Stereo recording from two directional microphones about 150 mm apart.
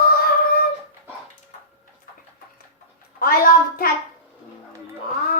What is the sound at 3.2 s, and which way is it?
Speech, 75° left (ahead or behind).